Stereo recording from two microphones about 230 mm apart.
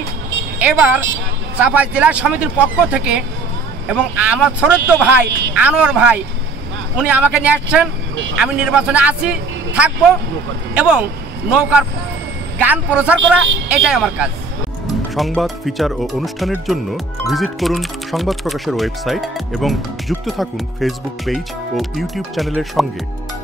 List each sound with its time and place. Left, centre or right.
0.6 s a woman's voice: centre